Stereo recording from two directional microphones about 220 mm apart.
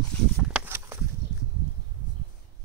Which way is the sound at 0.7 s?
10° right (ahead or behind).